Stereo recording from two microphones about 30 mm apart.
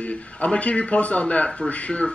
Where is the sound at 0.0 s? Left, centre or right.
Left.